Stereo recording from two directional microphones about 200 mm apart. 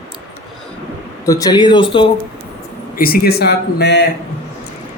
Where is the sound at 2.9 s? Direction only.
45° left (ahead or behind).